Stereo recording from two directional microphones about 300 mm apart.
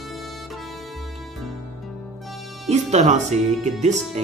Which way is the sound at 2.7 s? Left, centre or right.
Right.